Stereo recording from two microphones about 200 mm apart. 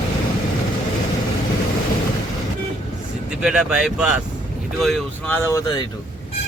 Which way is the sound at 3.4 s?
5° right (ahead or behind).